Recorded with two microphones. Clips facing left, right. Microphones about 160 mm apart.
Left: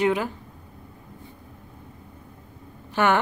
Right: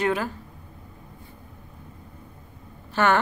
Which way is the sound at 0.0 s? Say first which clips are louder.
Left 2 dB; 15° left (ahead or behind).